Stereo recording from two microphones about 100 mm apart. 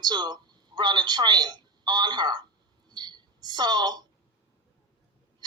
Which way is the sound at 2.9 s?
45° right (ahead or behind).